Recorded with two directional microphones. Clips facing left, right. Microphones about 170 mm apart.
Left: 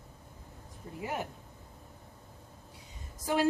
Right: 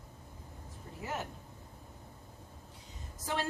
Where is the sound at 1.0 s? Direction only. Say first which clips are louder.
Left 3 dB; 10° left (ahead or behind).